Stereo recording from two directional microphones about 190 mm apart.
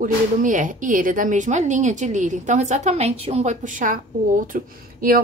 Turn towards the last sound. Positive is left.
turn(degrees=-50)  # may be behind; listen again after turning